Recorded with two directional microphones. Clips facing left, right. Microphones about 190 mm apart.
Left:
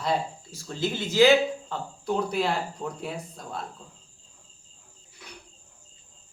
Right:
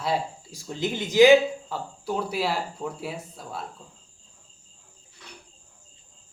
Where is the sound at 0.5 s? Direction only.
15° right (ahead or behind).